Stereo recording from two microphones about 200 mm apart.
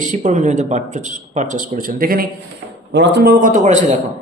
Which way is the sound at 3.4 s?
40° right (ahead or behind).